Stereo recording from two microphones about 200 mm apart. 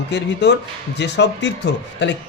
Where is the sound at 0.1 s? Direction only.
55° left (ahead or behind).